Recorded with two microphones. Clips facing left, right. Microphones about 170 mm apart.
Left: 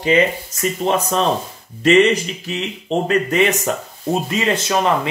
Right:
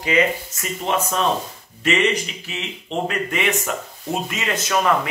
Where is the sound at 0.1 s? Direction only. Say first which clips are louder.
Left 2 dB; 30° left (ahead or behind).